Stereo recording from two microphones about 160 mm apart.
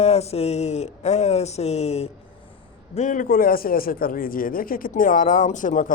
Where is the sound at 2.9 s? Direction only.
55° left (ahead or behind).